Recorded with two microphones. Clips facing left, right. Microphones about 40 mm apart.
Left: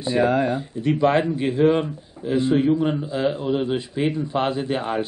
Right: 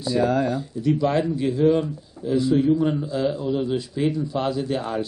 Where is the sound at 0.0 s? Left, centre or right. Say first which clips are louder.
Left 2 dB; left.